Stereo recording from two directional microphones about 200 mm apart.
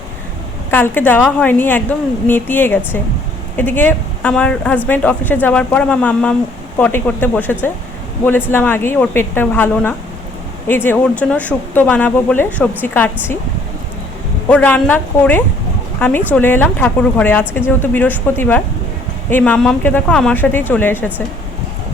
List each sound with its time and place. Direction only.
0.7 s speech: 10° left (ahead or behind)
14.5 s speech: 10° left (ahead or behind)